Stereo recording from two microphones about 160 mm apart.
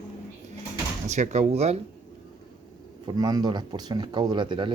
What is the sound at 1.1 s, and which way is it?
Speech, 45° right (ahead or behind).